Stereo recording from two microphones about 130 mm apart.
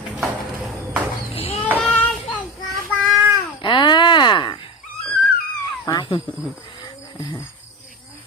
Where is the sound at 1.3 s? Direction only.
45° left (ahead or behind).